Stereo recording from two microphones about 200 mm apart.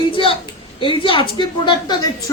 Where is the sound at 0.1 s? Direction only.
25° left (ahead or behind).